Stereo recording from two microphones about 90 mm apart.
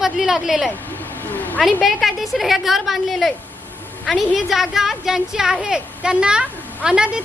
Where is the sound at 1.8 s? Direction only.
Centre (ahead or behind).